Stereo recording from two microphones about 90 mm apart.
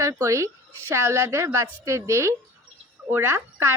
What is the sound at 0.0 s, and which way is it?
A woman's voice, 35° right (ahead or behind).